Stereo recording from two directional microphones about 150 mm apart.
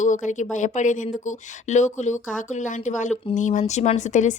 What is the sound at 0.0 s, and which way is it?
A woman's voice, 55° left (ahead or behind).